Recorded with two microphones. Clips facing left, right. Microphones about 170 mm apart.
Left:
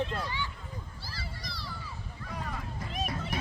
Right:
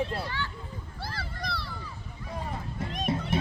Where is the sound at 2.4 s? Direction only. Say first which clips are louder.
Right 3 dB; 30° right (ahead or behind).